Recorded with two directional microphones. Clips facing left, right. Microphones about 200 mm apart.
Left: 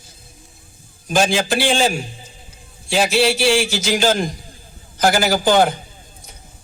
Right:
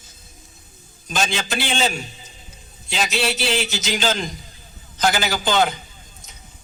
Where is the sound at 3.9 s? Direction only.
50° left (ahead or behind).